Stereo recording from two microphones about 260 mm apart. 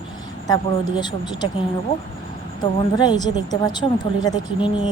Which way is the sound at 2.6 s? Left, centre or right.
Centre.